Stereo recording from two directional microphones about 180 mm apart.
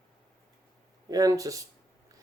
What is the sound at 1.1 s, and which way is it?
Speech, 20° right (ahead or behind).